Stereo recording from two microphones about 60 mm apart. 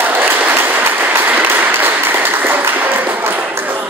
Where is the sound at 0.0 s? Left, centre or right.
Right.